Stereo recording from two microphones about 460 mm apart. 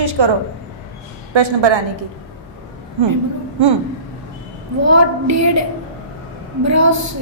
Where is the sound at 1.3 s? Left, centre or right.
Right.